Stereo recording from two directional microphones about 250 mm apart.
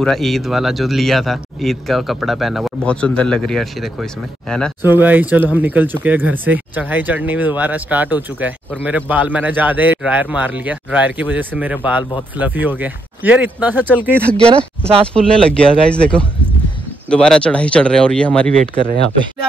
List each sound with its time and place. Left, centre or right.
0.0 s speech: centre
4.8 s speech: centre
15.1 s speech: centre
18.6 s speech: right